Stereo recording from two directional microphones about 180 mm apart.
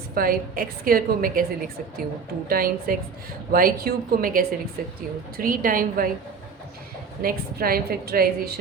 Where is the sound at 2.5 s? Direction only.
55° right (ahead or behind).